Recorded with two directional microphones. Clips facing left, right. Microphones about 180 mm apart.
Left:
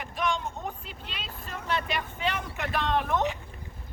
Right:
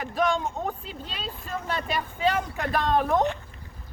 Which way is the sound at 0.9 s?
40° right (ahead or behind).